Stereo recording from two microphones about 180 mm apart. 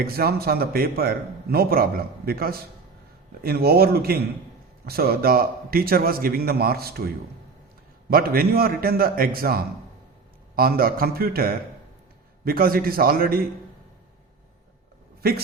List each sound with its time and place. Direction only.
0.0 s a man's voice: 55° right (ahead or behind)
8.1 s a man's voice: 55° right (ahead or behind)